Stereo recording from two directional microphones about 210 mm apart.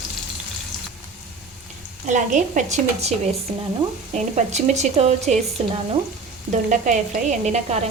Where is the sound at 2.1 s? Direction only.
35° right (ahead or behind).